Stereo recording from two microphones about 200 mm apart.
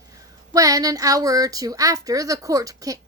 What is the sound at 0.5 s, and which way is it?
A woman's voice, 15° right (ahead or behind).